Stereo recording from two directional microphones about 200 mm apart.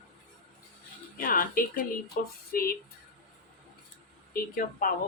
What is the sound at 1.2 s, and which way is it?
A woman's voice, 45° left (ahead or behind).